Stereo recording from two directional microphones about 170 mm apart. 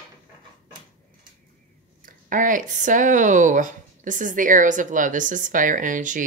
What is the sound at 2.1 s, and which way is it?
Speech, 50° right (ahead or behind).